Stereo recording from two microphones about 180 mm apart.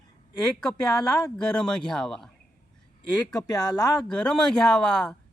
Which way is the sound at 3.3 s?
20° left (ahead or behind).